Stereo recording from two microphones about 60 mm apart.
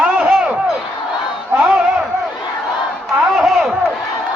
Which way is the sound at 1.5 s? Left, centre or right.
Centre.